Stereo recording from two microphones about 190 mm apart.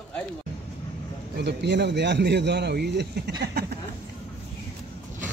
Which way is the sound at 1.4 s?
60° right (ahead or behind).